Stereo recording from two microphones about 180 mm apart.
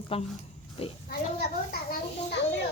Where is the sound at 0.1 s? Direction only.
30° left (ahead or behind).